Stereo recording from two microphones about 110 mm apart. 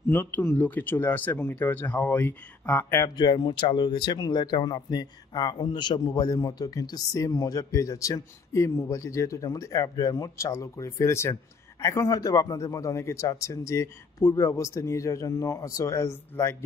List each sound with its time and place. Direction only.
0.1 s speech: 15° left (ahead or behind)
3.2 s a man's voice: 40° left (ahead or behind); by 16.5 s 25° left (ahead or behind)